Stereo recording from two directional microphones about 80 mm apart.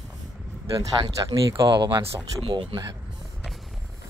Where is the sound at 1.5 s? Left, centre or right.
Right.